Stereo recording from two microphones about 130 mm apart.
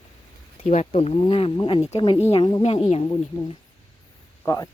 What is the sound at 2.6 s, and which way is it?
Speech, 60° left (ahead or behind).